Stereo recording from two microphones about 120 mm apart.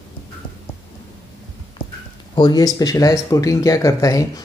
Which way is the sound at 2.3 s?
35° left (ahead or behind).